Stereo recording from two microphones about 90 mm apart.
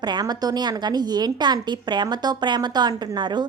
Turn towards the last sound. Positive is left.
turn(degrees=-55)  # may be behind; listen again after turning